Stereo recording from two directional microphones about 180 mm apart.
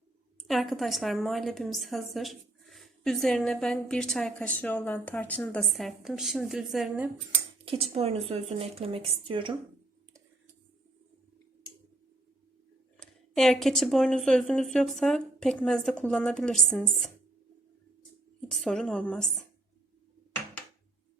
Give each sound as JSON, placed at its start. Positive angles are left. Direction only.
{"t": 0.4, "sound": "a woman's voice", "side_deg": 0}
{"t": 7.6, "sound": "speech", "side_deg": -30}
{"t": 13.0, "sound": "a woman's voice", "side_deg": 0}
{"t": 18.5, "sound": "a woman's voice", "side_deg": 0}